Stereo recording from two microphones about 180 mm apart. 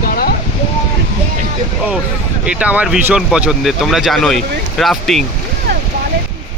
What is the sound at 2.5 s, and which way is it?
Speech, 10° right (ahead or behind).